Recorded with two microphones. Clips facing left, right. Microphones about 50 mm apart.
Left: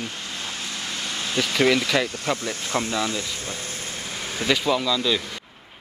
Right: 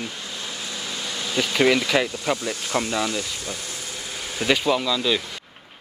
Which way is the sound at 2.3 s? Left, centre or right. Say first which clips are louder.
Right 1 dB; left.